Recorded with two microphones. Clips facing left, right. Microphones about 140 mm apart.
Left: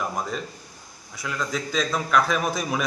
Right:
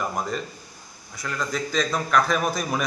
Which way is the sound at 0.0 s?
Centre (ahead or behind).